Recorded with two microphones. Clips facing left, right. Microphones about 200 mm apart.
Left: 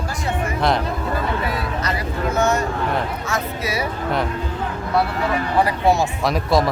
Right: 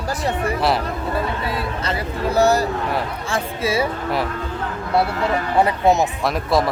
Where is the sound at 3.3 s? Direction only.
30° right (ahead or behind).